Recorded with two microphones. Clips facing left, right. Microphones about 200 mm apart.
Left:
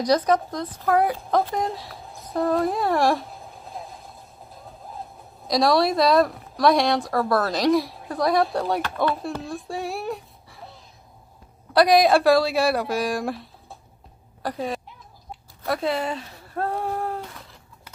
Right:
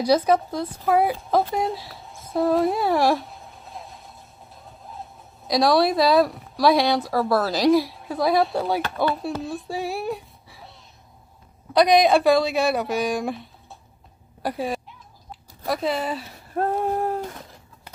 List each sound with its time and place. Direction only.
0.0 s speech: 5° right (ahead or behind)
5.5 s speech: centre (ahead or behind)
11.7 s speech: centre (ahead or behind)
16.5 s a sound: 20° right (ahead or behind)